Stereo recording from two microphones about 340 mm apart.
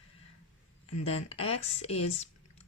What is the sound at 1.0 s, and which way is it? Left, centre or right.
Speech, centre.